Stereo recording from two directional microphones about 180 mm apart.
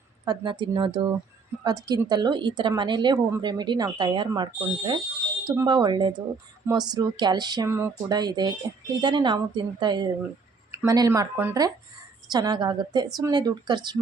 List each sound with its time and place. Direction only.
0.3 s a woman's voice: 25° right (ahead or behind)